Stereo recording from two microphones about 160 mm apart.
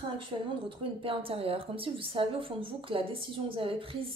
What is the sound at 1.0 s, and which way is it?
Speech, 35° right (ahead or behind).